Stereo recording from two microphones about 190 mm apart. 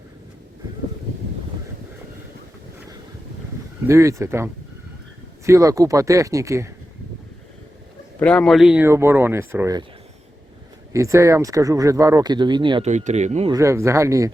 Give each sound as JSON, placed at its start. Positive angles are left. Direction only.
{"t": 3.8, "sound": "speech", "side_deg": -15}
{"t": 8.2, "sound": "speech", "side_deg": 5}
{"t": 10.9, "sound": "speech", "side_deg": -15}
{"t": 12.9, "sound": "speech", "side_deg": -35}
{"t": 13.5, "sound": "speech", "side_deg": -15}